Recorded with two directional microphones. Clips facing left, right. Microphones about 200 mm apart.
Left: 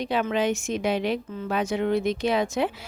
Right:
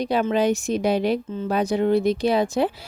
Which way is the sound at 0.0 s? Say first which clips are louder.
Right 4 dB; 40° right (ahead or behind).